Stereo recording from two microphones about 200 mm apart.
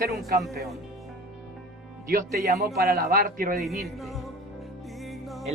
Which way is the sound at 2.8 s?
50° right (ahead or behind).